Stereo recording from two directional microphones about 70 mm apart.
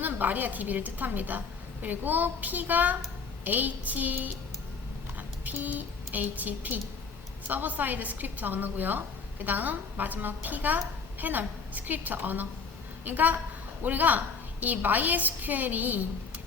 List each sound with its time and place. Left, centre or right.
0.0 s a woman's voice: right